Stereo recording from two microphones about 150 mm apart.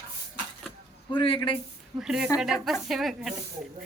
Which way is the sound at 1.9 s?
5° right (ahead or behind).